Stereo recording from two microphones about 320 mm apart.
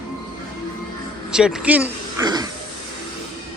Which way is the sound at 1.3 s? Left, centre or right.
Centre.